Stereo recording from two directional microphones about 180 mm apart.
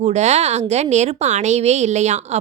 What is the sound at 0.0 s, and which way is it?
A woman's voice, 40° right (ahead or behind).